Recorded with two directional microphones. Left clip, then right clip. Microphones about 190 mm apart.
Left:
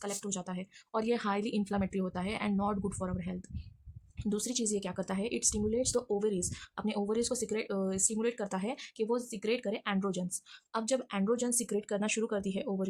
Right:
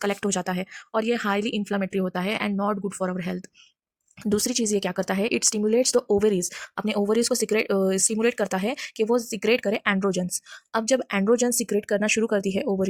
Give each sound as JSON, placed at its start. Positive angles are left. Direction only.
{"t": 0.0, "sound": "speech", "side_deg": -35}